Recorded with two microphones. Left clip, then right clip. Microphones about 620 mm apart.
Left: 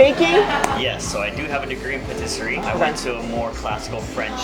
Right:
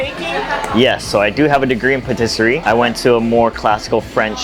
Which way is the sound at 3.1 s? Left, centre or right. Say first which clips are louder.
Right 13 dB; right.